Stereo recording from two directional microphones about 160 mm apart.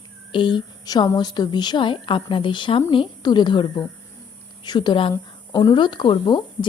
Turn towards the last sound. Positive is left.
turn(degrees=30)  # may be behind; listen again after turning